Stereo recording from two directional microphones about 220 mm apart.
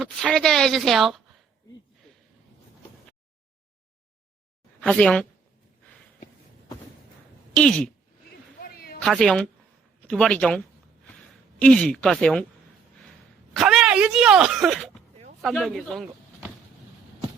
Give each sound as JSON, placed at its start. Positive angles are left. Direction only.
{"t": 0.0, "sound": "a woman's voice", "side_deg": 0}
{"t": 4.8, "sound": "a woman's voice", "side_deg": 0}
{"t": 7.5, "sound": "speech", "side_deg": 5}
{"t": 8.6, "sound": "a sound", "side_deg": 45}
{"t": 9.0, "sound": "a woman's voice", "side_deg": 0}
{"t": 11.6, "sound": "a woman's voice", "side_deg": 5}
{"t": 13.5, "sound": "speech", "side_deg": 0}